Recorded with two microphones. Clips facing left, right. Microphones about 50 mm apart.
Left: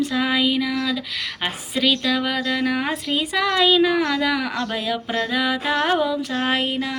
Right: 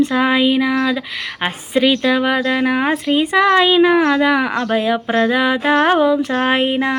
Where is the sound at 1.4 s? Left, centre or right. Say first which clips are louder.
Right 6 dB; right.